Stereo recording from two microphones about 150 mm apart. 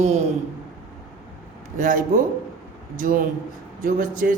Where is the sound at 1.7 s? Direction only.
65° right (ahead or behind).